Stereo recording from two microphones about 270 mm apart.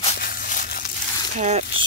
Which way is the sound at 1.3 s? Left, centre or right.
Right.